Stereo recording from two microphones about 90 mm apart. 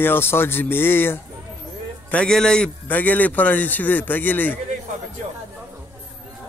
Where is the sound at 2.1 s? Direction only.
10° left (ahead or behind).